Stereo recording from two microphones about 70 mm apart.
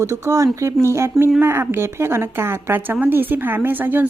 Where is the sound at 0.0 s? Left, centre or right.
Right.